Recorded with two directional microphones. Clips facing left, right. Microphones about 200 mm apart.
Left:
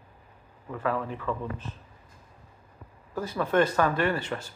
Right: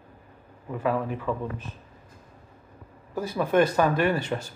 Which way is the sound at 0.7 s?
15° right (ahead or behind).